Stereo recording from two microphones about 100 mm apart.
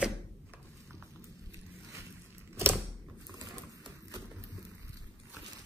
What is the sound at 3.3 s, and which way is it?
Typewriter, 35° right (ahead or behind).